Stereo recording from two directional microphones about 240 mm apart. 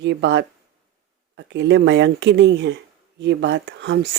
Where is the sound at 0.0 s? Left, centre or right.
Right.